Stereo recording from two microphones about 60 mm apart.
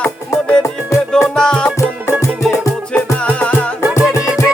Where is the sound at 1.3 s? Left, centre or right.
Centre.